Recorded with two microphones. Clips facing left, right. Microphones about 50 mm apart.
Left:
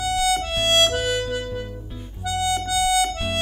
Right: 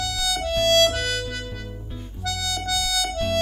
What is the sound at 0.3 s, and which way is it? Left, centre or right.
Harmonica, left.